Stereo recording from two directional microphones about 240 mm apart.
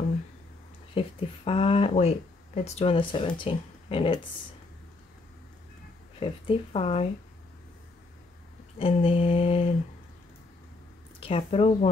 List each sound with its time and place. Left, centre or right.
0.9 s speech: left
6.1 s speech: left
8.7 s speech: left
11.1 s speech: left